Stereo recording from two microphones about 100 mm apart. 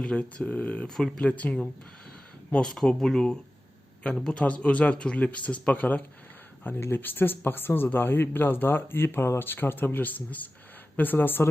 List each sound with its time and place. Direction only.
0.0 s speech: 10° left (ahead or behind)